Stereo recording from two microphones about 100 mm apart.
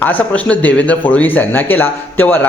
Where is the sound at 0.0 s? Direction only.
15° left (ahead or behind).